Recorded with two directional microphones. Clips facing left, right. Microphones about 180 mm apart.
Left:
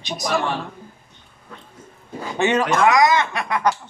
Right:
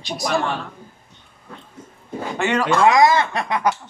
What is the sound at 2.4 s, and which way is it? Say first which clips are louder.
Speech: left 1 dB; 20° left (ahead or behind).